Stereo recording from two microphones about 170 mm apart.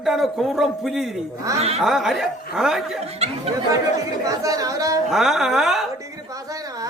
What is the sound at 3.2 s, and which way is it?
Speech, 40° right (ahead or behind).